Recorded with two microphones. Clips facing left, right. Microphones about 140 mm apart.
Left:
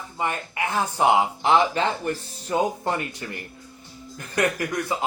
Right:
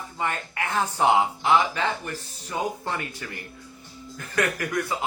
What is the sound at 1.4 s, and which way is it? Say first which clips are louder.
Speech: left 2 dB; 25° left (ahead or behind).